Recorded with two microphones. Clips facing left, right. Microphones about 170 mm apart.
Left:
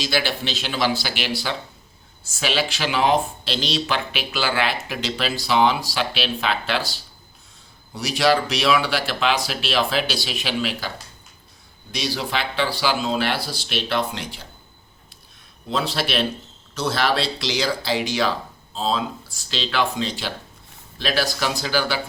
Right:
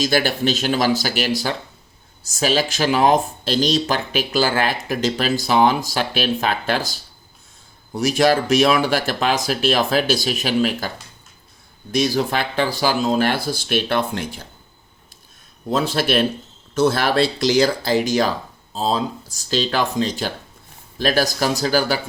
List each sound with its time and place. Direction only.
0.0 s speech: 45° right (ahead or behind)
15.7 s speech: 50° right (ahead or behind)